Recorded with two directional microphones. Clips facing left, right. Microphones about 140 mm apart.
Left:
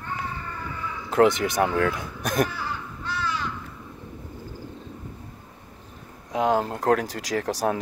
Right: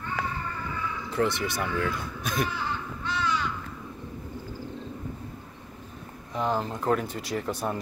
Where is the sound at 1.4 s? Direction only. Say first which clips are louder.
Left 6 dB; 55° left (ahead or behind).